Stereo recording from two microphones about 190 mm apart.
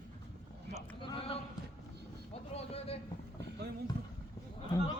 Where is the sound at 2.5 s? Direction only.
30° left (ahead or behind).